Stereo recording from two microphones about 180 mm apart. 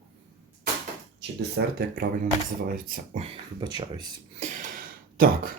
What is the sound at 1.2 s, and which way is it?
Speech, 65° right (ahead or behind).